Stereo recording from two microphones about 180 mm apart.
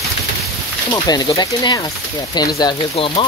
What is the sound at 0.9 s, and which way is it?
Speech, 20° left (ahead or behind).